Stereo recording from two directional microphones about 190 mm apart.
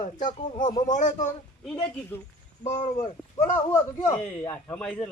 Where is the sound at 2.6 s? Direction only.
40° left (ahead or behind).